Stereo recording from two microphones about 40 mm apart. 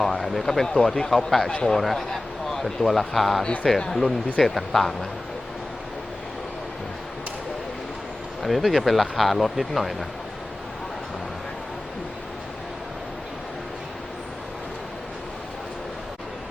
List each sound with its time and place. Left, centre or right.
0.0 s speech: centre
3.4 s speech: left
4.4 s speech: centre
8.4 s speech: centre